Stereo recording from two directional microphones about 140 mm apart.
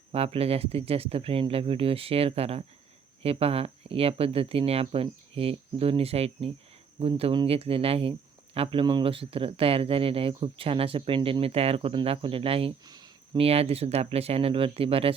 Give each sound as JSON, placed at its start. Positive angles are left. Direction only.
{"t": 0.1, "sound": "speech", "side_deg": -45}
{"t": 12.8, "sound": "a sound", "side_deg": -30}
{"t": 13.4, "sound": "speech", "side_deg": -45}